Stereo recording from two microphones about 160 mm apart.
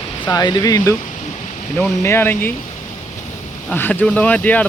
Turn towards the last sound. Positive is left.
turn(degrees=10)  # may be behind; listen again after turning